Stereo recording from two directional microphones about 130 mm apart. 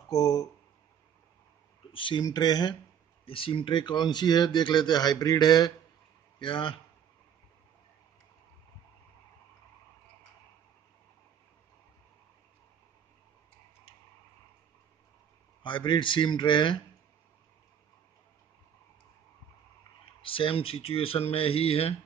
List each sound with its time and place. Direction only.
0.1 s speech: 30° left (ahead or behind)
1.9 s speech: 40° left (ahead or behind)
3.3 s speech: 45° left (ahead or behind)
15.6 s speech: 35° left (ahead or behind)
20.2 s speech: 45° left (ahead or behind)